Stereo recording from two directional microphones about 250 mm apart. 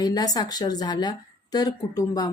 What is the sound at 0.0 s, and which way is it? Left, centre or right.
Speech, centre.